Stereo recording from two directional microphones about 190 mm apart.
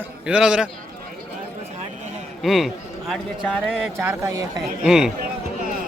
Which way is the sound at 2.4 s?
Centre (ahead or behind).